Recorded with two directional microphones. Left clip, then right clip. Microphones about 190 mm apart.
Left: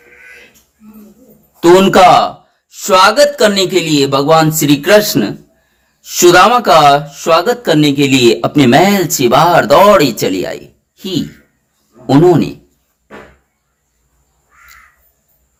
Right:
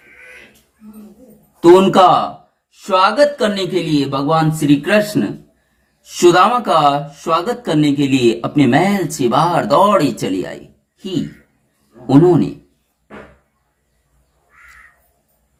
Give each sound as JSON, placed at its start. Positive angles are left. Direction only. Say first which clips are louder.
{"t": 1.6, "sound": "speech", "louder": "left 3 dB", "side_deg": 35}